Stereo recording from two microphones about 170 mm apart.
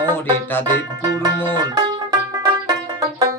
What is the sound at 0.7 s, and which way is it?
Speech, 20° right (ahead or behind).